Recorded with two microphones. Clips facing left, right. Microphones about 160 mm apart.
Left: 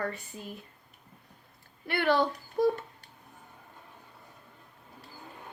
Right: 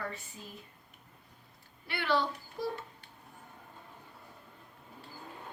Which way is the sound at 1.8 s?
55° left (ahead or behind).